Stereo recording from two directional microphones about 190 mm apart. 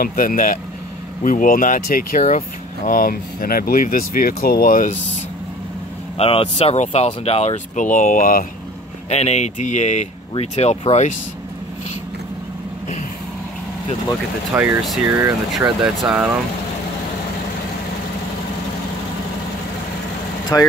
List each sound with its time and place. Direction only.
0.0 s speech: 50° left (ahead or behind)
6.1 s speech: 30° left (ahead or behind); by 8.5 s 45° left (ahead or behind)
9.1 s speech: 35° left (ahead or behind)
14.5 s speech: 10° right (ahead or behind)
20.5 s speech: 15° left (ahead or behind)